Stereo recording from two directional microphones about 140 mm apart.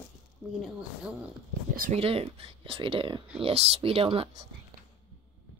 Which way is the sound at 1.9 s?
45° right (ahead or behind).